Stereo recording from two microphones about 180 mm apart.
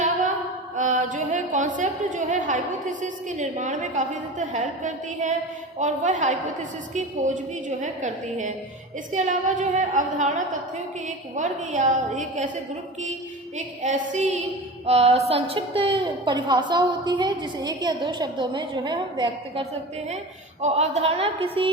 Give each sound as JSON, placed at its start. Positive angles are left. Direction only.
{"t": 0.8, "sound": "a woman's voice", "side_deg": -45}
{"t": 13.6, "sound": "a woman's voice", "side_deg": -45}
{"t": 20.6, "sound": "a woman's voice", "side_deg": -35}